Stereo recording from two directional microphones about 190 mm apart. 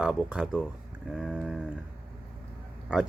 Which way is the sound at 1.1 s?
Centre (ahead or behind).